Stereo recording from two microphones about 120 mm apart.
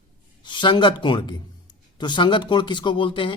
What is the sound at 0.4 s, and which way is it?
Speech, 40° left (ahead or behind).